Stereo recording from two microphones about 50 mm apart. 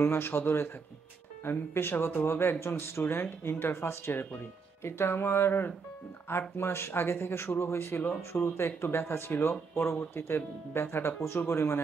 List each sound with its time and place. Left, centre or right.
0.0 s speech: left